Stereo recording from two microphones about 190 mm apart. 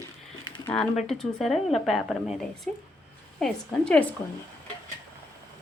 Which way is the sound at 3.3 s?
5° left (ahead or behind).